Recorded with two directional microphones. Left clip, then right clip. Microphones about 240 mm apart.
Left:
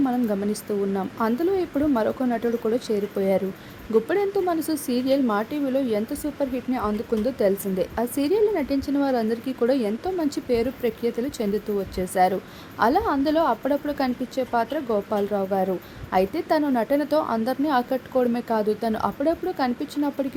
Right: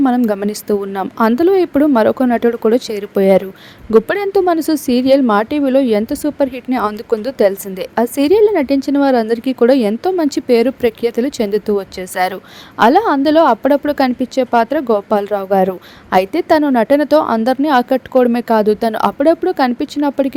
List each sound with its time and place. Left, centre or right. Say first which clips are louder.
0.0 s a woman's voice: right 10 dB; right